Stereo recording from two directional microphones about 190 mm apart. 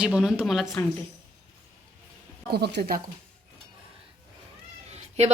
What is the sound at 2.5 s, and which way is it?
Speech, 60° right (ahead or behind).